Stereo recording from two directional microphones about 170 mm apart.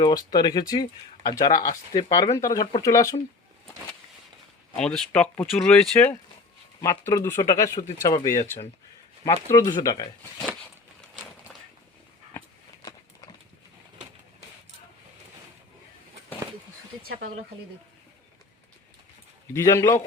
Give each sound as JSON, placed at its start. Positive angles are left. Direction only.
{"t": 0.0, "sound": "speech", "side_deg": 25}
{"t": 4.8, "sound": "speech", "side_deg": 5}
{"t": 17.0, "sound": "a sound", "side_deg": -60}
{"t": 19.5, "sound": "speech", "side_deg": 20}